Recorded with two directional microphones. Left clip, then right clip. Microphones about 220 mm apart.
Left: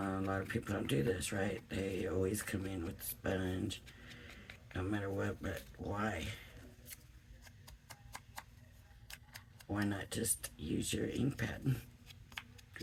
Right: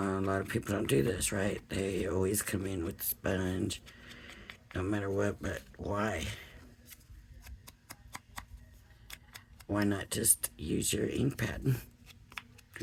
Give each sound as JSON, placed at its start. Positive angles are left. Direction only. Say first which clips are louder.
{"t": 0.0, "sound": "speech", "louder": "right 6 dB", "side_deg": -45}
{"t": 9.7, "sound": "speech", "louder": "right 7 dB", "side_deg": -45}